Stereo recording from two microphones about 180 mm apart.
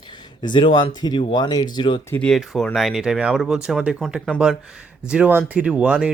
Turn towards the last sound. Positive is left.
turn(degrees=-5)  # may be behind; listen again after turning